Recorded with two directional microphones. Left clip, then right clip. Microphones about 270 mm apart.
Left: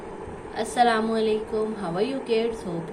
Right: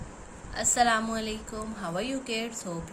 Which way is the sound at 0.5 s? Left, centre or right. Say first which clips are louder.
Left 3 dB; right.